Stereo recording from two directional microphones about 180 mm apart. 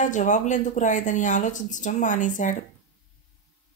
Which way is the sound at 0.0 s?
45° left (ahead or behind).